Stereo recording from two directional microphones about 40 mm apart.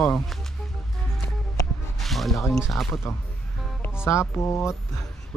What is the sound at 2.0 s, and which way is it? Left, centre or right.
Speech, centre.